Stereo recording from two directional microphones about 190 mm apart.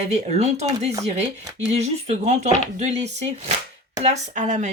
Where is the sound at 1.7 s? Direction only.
35° right (ahead or behind).